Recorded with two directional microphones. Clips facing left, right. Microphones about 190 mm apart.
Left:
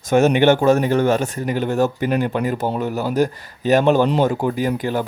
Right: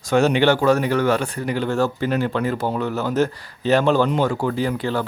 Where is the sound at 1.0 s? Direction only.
45° left (ahead or behind).